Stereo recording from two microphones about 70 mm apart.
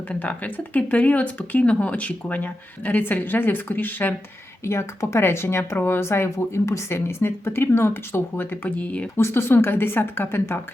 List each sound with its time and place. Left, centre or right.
0.1 s speech: left
4.6 s speech: left
9.1 s speech: left